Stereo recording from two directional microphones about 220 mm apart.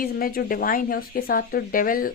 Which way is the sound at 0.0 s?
40° left (ahead or behind).